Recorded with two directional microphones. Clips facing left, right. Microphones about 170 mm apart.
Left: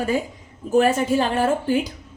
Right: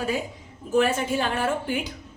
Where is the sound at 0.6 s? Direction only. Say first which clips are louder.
Left 4 dB; 40° left (ahead or behind).